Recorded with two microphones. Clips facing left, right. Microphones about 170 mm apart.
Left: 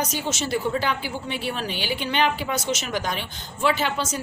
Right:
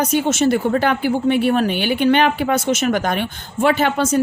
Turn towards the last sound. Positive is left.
turn(degrees=-55)  # may be behind; listen again after turning